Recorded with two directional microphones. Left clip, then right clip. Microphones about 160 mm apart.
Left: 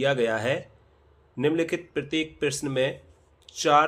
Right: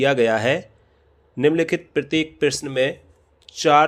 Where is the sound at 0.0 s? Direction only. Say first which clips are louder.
Right 6 dB; 40° right (ahead or behind).